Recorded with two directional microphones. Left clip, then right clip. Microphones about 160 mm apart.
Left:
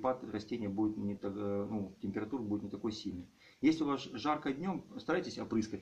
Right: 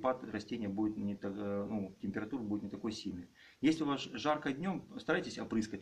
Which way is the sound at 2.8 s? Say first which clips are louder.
Left 1 dB; 15° right (ahead or behind).